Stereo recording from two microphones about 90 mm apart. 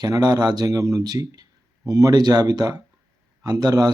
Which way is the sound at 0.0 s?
45° right (ahead or behind).